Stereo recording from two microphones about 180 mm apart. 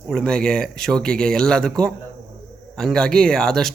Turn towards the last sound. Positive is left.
turn(degrees=5)  # may be behind; listen again after turning